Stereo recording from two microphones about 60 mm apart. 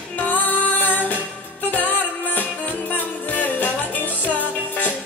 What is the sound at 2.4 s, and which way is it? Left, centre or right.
Music, left.